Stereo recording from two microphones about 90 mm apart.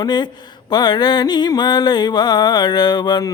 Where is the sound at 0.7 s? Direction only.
55° left (ahead or behind).